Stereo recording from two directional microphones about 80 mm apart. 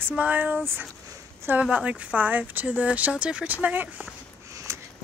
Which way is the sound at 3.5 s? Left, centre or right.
Right.